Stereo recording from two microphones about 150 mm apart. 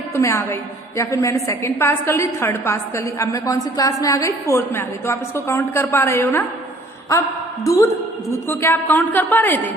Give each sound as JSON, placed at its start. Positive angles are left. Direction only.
{"t": 0.1, "sound": "a woman's voice", "side_deg": 20}
{"t": 7.6, "sound": "a woman's voice", "side_deg": 20}